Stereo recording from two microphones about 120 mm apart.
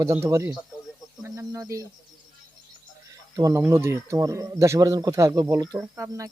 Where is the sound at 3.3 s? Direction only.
25° right (ahead or behind).